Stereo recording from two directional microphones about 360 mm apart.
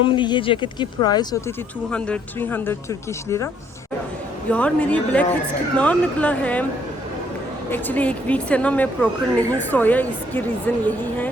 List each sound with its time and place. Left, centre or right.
0.0 s a woman's voice: centre
7.7 s a woman's voice: centre